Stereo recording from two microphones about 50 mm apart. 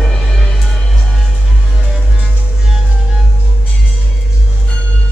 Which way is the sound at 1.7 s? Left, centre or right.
Centre.